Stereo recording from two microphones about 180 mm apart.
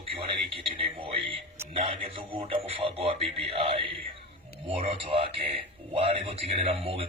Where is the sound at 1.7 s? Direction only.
30° right (ahead or behind).